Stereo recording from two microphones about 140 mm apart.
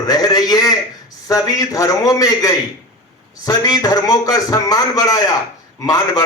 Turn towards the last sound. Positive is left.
turn(degrees=25)  # may be behind; listen again after turning